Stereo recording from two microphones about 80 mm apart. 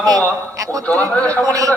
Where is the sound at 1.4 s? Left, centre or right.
Right.